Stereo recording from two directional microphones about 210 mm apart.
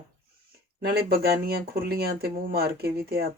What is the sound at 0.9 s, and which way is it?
A woman's voice, 50° right (ahead or behind).